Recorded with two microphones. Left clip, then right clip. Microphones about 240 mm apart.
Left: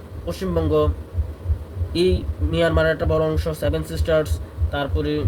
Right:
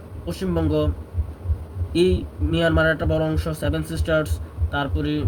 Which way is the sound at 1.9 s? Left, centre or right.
Centre.